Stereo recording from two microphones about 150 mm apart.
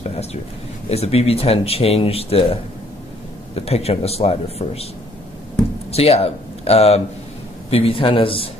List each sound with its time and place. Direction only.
0.0 s a sound: 45° left (ahead or behind)
0.8 s a man's voice: 45° left (ahead or behind)
5.9 s speech: 45° left (ahead or behind)